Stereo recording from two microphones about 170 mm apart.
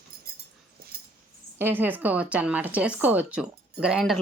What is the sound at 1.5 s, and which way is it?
A woman's voice, 10° right (ahead or behind).